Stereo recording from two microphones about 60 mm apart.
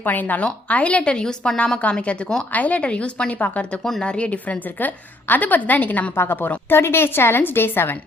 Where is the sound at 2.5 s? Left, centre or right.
Left.